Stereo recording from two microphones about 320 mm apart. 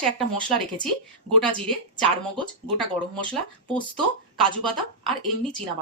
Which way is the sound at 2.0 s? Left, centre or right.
Centre.